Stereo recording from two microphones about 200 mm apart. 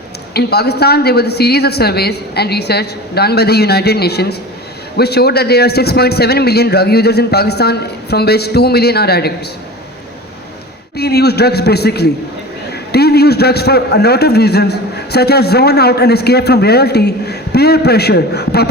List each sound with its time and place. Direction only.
0.3 s a man's voice: 55° left (ahead or behind)
10.9 s a man's voice: 55° left (ahead or behind)